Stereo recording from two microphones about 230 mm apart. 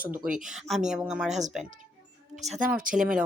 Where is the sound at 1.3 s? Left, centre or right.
Right.